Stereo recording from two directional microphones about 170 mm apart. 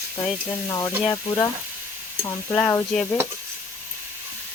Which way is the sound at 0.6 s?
15° left (ahead or behind).